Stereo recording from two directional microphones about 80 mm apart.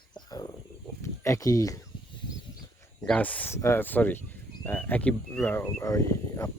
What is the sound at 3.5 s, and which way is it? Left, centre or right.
Speech, left.